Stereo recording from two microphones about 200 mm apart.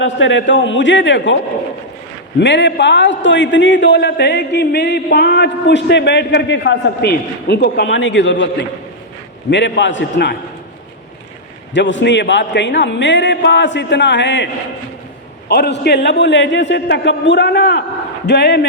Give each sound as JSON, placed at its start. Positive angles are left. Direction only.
{"t": 0.0, "sound": "a man's voice", "side_deg": 70}
{"t": 2.4, "sound": "a man's voice", "side_deg": 60}
{"t": 9.5, "sound": "a man's voice", "side_deg": 65}
{"t": 11.7, "sound": "a man's voice", "side_deg": 65}